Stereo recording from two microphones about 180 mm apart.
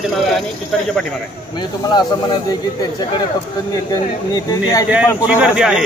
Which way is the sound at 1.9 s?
25° left (ahead or behind).